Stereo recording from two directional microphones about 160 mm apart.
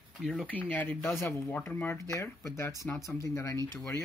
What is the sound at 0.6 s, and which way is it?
Speech, 10° left (ahead or behind).